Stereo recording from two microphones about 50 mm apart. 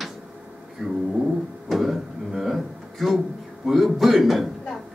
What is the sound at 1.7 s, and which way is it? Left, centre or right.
Music, centre.